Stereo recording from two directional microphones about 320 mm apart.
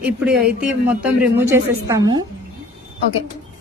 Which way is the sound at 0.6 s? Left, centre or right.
Centre.